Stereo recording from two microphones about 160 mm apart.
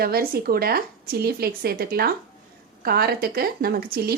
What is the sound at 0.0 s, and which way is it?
A woman's voice, 70° right (ahead or behind).